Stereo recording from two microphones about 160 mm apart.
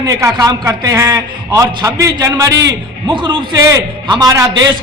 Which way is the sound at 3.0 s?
30° right (ahead or behind).